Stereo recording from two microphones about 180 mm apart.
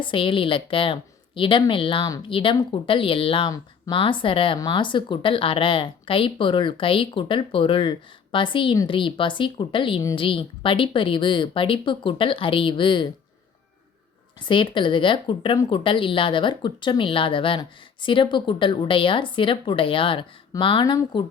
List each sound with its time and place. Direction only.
0.0 s speech: 30° left (ahead or behind)
14.4 s speech: 25° left (ahead or behind)